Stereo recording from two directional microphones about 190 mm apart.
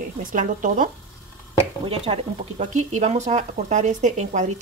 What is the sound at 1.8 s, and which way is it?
Speech, 30° right (ahead or behind).